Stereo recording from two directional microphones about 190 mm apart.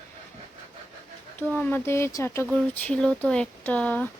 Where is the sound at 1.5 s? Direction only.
10° left (ahead or behind).